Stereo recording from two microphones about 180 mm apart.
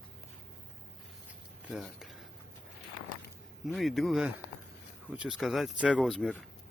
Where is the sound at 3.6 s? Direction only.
Centre (ahead or behind).